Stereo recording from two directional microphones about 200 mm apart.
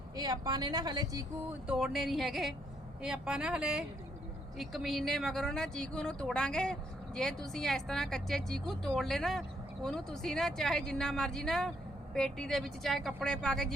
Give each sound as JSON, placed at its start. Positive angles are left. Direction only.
{"t": 0.2, "sound": "speech", "side_deg": -20}
{"t": 1.6, "sound": "speech", "side_deg": -5}